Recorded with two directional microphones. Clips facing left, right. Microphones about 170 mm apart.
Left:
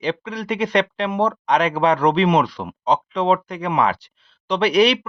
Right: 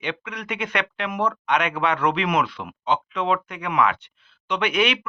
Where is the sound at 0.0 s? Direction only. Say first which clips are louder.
Left 6 dB; 35° left (ahead or behind).